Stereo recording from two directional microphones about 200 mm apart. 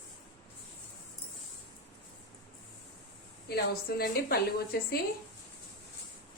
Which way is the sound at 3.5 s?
50° left (ahead or behind).